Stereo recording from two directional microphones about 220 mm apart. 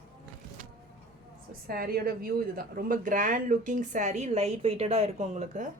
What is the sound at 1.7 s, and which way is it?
Speech, 45° right (ahead or behind).